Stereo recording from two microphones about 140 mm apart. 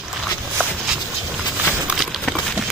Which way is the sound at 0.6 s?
10° right (ahead or behind).